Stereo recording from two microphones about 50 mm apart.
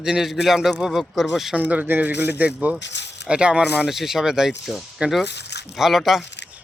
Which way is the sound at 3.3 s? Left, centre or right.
Right.